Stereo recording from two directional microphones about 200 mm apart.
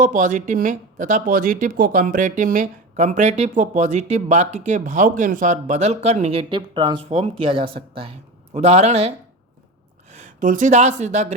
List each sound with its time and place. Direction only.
0.0 s speech: 40° right (ahead or behind); by 7.1 s 20° right (ahead or behind)
7.1 s speech: 30° right (ahead or behind)